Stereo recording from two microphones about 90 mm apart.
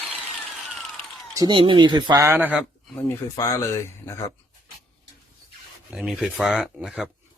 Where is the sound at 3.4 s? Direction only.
35° left (ahead or behind).